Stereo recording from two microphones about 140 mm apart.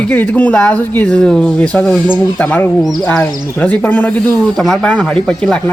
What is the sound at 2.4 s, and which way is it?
Speech, 10° left (ahead or behind).